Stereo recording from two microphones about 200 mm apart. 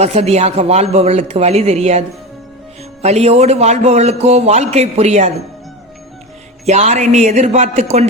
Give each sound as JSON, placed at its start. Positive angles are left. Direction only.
{"t": 0.0, "sound": "a man's voice", "side_deg": -30}
{"t": 6.7, "sound": "a man's voice", "side_deg": -35}